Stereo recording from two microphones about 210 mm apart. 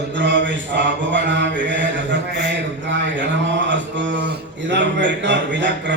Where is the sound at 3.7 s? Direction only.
60° right (ahead or behind).